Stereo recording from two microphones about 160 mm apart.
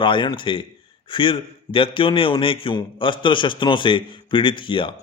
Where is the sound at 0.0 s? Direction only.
30° left (ahead or behind).